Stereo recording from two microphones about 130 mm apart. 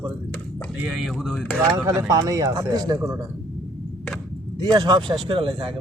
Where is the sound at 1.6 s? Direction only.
25° right (ahead or behind).